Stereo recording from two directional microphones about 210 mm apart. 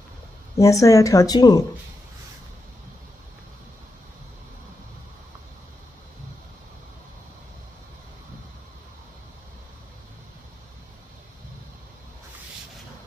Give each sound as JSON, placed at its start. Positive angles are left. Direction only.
{"t": 0.6, "sound": "speech", "side_deg": 15}